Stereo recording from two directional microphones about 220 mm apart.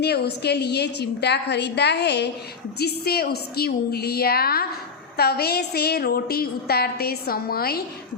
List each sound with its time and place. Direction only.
0.0 s a woman's voice: 50° left (ahead or behind)